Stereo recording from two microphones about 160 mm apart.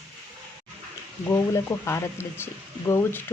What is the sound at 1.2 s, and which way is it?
Speech, 20° left (ahead or behind).